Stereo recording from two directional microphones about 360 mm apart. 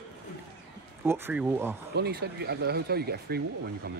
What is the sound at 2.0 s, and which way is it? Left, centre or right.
Speech, right.